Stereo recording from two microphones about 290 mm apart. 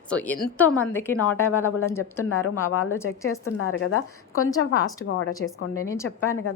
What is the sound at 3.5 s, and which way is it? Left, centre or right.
A woman's voice, left.